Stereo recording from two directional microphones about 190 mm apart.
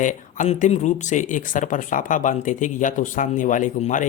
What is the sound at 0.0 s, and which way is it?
Speech, 40° left (ahead or behind).